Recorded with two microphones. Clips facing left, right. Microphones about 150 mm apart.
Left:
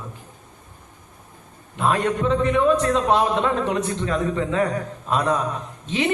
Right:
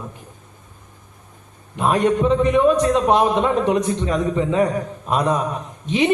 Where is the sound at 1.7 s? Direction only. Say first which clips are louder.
Right 4 dB; 15° right (ahead or behind).